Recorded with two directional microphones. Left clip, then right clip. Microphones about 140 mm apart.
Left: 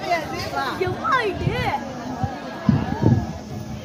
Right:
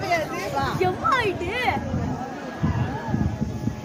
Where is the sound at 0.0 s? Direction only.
25° right (ahead or behind).